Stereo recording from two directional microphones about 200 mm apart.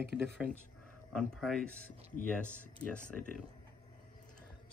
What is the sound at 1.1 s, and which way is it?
Speech, centre (ahead or behind).